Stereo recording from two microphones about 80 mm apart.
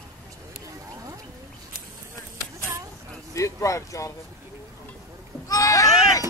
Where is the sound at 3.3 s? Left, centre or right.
Left.